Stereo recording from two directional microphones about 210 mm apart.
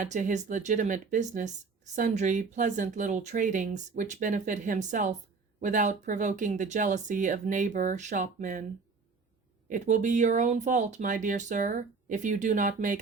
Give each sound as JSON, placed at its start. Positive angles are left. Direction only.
{"t": 0.0, "sound": "speech", "side_deg": -35}
{"t": 9.6, "sound": "speech", "side_deg": -35}